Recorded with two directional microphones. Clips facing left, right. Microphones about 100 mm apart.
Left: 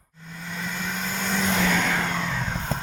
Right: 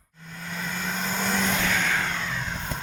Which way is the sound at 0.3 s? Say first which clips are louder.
Even; centre (ahead or behind).